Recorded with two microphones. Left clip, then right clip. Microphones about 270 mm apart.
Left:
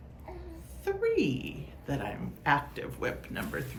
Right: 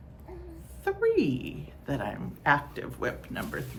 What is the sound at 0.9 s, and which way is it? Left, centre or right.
A woman's voice, centre.